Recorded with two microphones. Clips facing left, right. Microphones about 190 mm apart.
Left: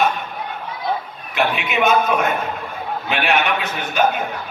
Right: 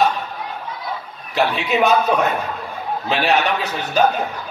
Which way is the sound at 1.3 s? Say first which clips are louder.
Right 2 dB; 35° right (ahead or behind).